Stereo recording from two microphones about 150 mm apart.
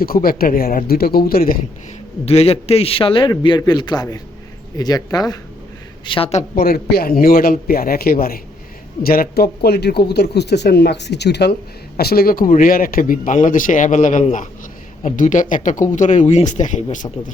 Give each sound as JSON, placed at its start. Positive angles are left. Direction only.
{"t": 0.0, "sound": "speech", "side_deg": 75}
{"t": 2.2, "sound": "a man's voice", "side_deg": 45}
{"t": 6.1, "sound": "a man's voice", "side_deg": 40}
{"t": 6.6, "sound": "a man's voice", "side_deg": 85}